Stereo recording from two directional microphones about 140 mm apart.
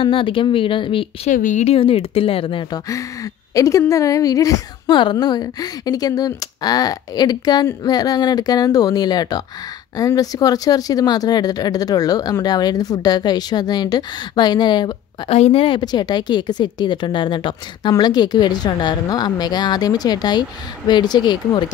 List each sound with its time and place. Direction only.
0.0 s a woman's voice: 40° left (ahead or behind)
1.3 s speech: 65° left (ahead or behind)
1.7 s a woman's voice: 40° left (ahead or behind)
3.5 s a woman's voice: 25° left (ahead or behind)
15.3 s a woman's voice: 45° left (ahead or behind)